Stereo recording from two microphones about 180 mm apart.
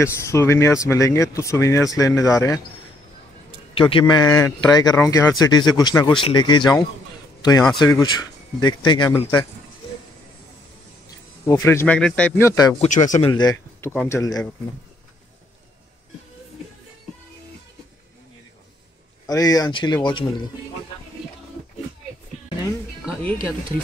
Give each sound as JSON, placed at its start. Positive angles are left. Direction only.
{"t": 0.0, "sound": "speech", "side_deg": 15}
{"t": 3.7, "sound": "speech", "side_deg": 30}
{"t": 11.4, "sound": "speech", "side_deg": 15}
{"t": 12.7, "sound": "speech", "side_deg": 40}
{"t": 13.2, "sound": "speech", "side_deg": 25}
{"t": 19.2, "sound": "speech", "side_deg": 20}